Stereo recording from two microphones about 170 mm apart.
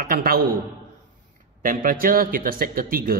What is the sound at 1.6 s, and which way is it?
A man's voice, 55° right (ahead or behind).